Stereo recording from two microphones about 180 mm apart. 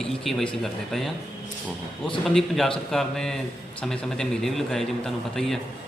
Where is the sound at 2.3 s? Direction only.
Centre (ahead or behind).